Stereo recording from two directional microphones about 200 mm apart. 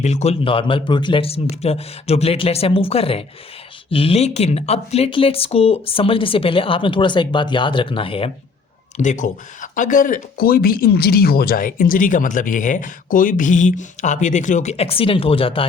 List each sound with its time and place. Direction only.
0.0 s speech: 35° left (ahead or behind)
9.0 s speech: 40° left (ahead or behind)